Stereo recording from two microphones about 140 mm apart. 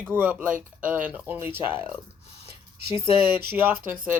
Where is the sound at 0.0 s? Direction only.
10° right (ahead or behind).